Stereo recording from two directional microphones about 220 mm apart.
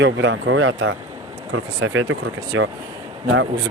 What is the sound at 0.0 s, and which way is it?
Speech, 55° right (ahead or behind).